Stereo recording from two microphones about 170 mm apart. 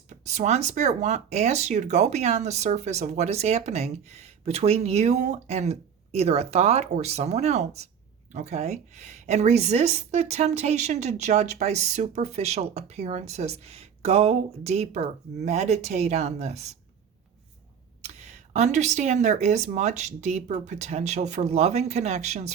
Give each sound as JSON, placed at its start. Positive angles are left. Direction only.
{"t": 0.1, "sound": "speech", "side_deg": -40}
{"t": 18.0, "sound": "speech", "side_deg": -40}